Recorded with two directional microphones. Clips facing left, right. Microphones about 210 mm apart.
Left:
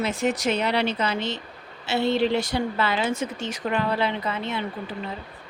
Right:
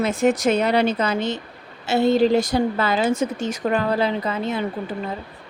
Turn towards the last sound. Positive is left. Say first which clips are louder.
# right 5 dB
turn(degrees=-45)  # may be behind; listen again after turning